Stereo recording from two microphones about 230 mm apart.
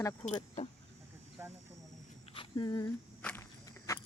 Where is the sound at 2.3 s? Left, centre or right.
Centre.